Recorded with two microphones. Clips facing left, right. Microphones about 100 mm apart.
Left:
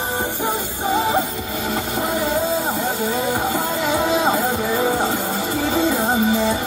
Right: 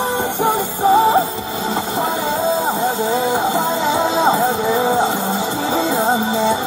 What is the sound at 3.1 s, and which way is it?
Music, 25° right (ahead or behind).